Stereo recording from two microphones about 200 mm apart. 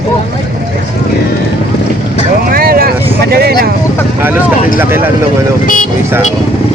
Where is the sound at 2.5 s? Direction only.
45° right (ahead or behind).